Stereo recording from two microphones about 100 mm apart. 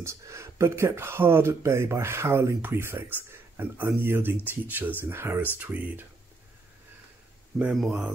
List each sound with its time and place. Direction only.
0.0 s speech: 25° right (ahead or behind)
7.7 s speech: centre (ahead or behind)